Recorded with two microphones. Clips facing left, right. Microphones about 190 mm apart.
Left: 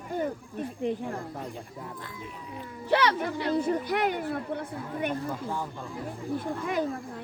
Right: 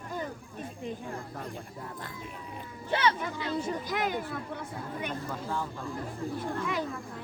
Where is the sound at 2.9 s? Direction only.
70° left (ahead or behind).